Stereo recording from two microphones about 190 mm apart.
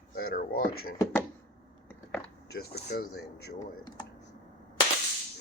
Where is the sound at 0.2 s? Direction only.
50° left (ahead or behind).